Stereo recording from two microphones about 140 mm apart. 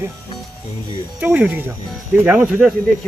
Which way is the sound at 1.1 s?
10° right (ahead or behind).